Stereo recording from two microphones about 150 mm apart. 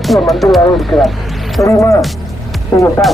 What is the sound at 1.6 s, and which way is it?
Speech, 20° left (ahead or behind).